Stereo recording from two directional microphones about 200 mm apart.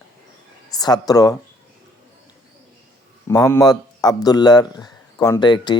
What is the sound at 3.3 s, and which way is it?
Speech, 15° left (ahead or behind).